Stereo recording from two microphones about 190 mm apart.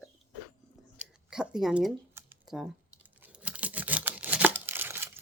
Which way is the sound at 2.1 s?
5° right (ahead or behind).